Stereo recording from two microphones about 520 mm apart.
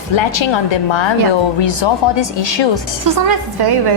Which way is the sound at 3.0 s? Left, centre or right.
Right.